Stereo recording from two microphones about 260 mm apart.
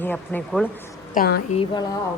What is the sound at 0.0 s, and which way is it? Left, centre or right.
Speech, centre.